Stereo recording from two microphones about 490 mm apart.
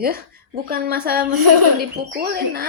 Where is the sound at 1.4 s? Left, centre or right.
Right.